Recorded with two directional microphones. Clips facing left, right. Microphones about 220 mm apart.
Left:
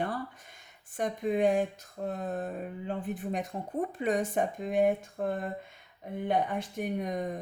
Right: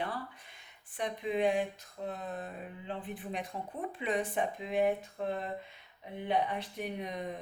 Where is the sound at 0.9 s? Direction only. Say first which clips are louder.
Left 4 dB; 45° left (ahead or behind).